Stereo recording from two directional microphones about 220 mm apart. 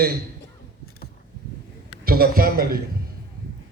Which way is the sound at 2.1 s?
40° right (ahead or behind).